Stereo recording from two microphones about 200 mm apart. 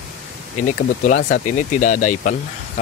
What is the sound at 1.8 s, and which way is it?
Speech, 40° left (ahead or behind).